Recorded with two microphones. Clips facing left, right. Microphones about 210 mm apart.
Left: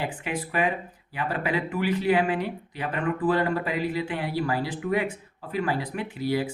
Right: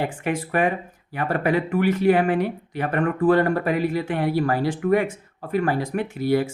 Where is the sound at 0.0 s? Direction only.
50° right (ahead or behind).